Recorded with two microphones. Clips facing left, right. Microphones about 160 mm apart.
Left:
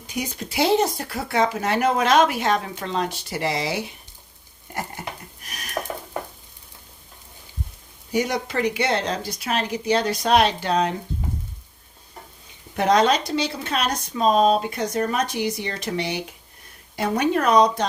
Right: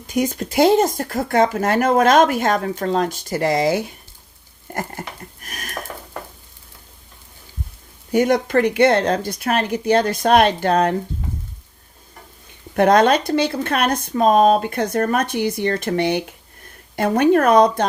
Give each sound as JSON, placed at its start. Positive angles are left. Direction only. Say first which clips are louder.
{"t": 0.1, "sound": "speech", "louder": "right 9 dB", "side_deg": -50}
{"t": 8.1, "sound": "speech", "louder": "right 7 dB", "side_deg": -55}
{"t": 12.7, "sound": "speech", "louder": "right 5 dB", "side_deg": -55}